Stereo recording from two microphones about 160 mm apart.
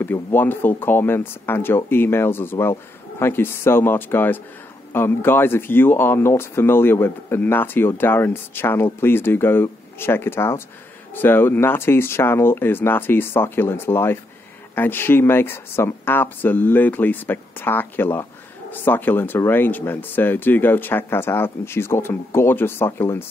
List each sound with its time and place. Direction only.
0.0 s speech: 15° left (ahead or behind)